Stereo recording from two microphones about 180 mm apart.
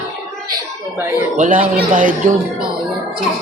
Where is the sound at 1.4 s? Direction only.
45° right (ahead or behind).